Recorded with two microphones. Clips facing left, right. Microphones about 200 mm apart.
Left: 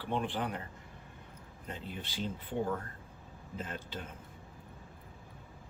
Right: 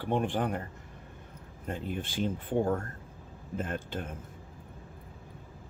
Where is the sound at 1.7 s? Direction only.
50° right (ahead or behind).